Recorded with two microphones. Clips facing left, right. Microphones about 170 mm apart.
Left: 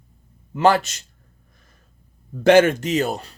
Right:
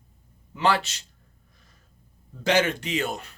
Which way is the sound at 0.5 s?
45° left (ahead or behind).